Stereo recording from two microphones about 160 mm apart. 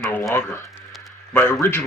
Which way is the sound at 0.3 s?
15° left (ahead or behind).